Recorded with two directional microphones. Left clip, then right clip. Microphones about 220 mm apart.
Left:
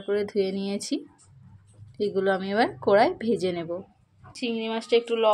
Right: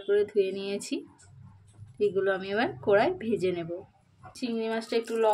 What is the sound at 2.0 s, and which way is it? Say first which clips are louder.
Speech: left 2 dB; 25° left (ahead or behind).